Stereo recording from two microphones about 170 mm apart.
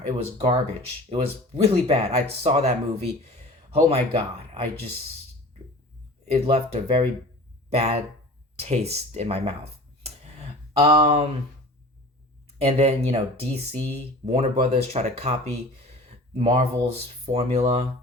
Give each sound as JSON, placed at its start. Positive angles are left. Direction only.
{"t": 0.3, "sound": "speech", "side_deg": -35}
{"t": 6.3, "sound": "speech", "side_deg": -35}
{"t": 10.8, "sound": "speech", "side_deg": -35}
{"t": 12.6, "sound": "speech", "side_deg": -35}